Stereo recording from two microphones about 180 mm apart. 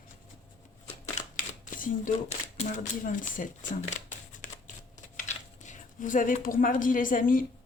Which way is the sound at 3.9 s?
40° left (ahead or behind).